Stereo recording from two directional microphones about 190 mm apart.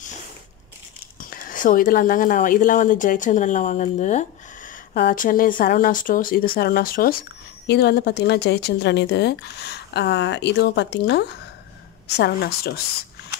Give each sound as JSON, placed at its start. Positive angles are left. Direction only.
{"t": 1.3, "sound": "speech", "side_deg": 45}
{"t": 4.9, "sound": "speech", "side_deg": 50}